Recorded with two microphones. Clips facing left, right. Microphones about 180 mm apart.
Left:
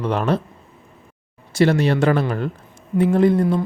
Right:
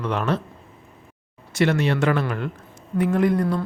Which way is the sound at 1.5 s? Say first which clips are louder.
Left 4 dB; 35° left (ahead or behind).